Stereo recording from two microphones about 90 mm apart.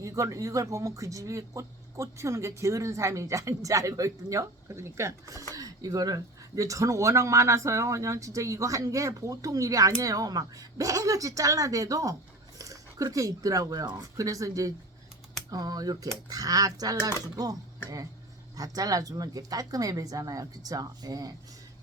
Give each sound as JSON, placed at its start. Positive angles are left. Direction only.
{"t": 0.0, "sound": "speech", "side_deg": -35}